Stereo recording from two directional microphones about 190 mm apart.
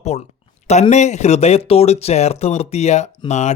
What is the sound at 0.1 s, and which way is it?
Speech, 30° left (ahead or behind).